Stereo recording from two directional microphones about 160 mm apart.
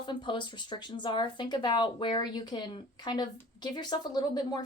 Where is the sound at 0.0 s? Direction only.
30° left (ahead or behind).